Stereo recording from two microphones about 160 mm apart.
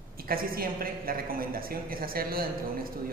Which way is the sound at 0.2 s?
65° right (ahead or behind).